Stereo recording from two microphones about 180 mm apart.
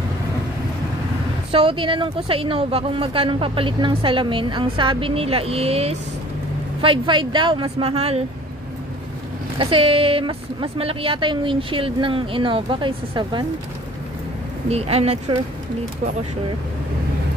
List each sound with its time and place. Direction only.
1.5 s speech: 30° right (ahead or behind)
9.6 s speech: 30° right (ahead or behind)
14.7 s speech: 35° right (ahead or behind)